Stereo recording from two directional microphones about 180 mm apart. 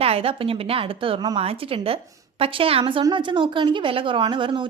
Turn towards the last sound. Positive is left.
turn(degrees=-25)  # may be behind; listen again after turning